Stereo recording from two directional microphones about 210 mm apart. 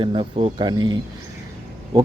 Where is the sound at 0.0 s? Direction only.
25° right (ahead or behind).